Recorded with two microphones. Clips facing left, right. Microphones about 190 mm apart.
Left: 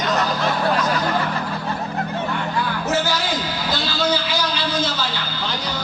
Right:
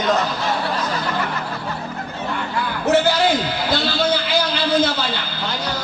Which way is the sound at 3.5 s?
60° right (ahead or behind).